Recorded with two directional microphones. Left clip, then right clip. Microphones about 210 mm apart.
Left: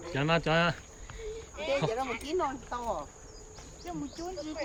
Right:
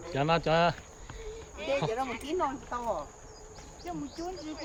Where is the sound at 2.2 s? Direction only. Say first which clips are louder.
Even; 15° left (ahead or behind).